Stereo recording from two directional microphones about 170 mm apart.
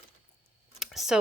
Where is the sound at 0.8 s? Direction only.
Centre (ahead or behind).